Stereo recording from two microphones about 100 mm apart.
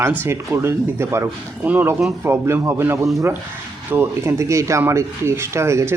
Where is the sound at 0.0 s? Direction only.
20° right (ahead or behind).